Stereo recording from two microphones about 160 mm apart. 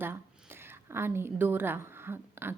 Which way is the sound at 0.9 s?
15° right (ahead or behind).